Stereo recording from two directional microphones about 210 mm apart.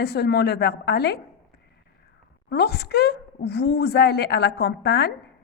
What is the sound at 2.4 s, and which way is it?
A woman's voice, 50° left (ahead or behind).